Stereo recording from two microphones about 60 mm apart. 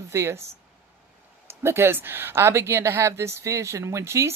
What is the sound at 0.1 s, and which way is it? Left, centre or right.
Speech, right.